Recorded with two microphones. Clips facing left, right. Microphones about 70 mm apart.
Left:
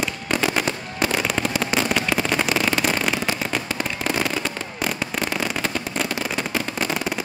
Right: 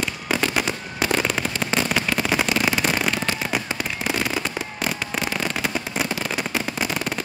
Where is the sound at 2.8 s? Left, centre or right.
Centre.